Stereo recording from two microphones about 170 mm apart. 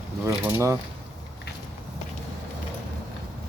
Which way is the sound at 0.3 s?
15° right (ahead or behind).